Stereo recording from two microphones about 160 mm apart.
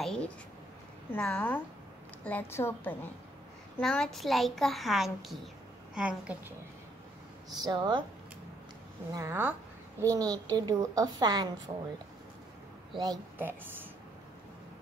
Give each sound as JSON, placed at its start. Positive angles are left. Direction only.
{"t": 0.0, "sound": "a sound", "side_deg": 5}
{"t": 1.1, "sound": "a woman's voice", "side_deg": 10}
{"t": 7.4, "sound": "a woman's voice", "side_deg": -25}
{"t": 9.1, "sound": "a woman's voice", "side_deg": -15}
{"t": 12.9, "sound": "a woman's voice", "side_deg": -25}
{"t": 13.4, "sound": "a woman's voice", "side_deg": -15}